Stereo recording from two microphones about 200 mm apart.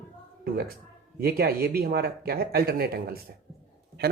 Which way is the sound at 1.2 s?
50° right (ahead or behind).